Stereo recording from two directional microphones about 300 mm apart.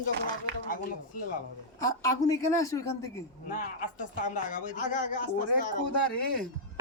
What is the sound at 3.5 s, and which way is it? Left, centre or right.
Speech, left.